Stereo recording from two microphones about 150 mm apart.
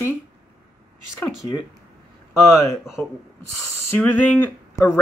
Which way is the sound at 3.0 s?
10° left (ahead or behind).